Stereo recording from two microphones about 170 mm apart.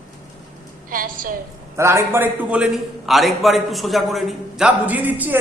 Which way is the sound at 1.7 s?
15° right (ahead or behind).